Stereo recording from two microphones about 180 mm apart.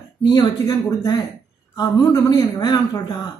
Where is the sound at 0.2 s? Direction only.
20° left (ahead or behind).